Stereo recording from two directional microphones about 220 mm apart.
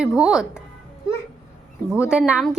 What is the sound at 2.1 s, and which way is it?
Speech, 5° right (ahead or behind).